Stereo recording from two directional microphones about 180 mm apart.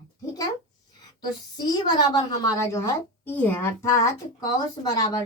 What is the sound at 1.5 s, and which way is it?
A woman's voice, 25° left (ahead or behind).